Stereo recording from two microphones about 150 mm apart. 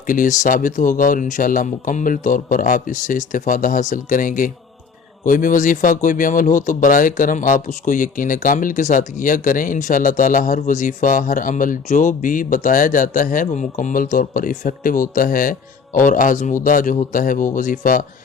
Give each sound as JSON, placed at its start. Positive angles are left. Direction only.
{"t": 0.1, "sound": "speech", "side_deg": 60}